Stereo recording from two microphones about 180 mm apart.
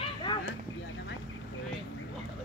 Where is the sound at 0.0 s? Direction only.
25° left (ahead or behind).